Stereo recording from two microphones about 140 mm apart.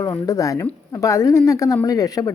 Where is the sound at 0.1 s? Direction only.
25° left (ahead or behind).